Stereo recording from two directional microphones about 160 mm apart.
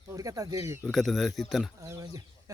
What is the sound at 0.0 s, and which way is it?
Speech, 20° right (ahead or behind).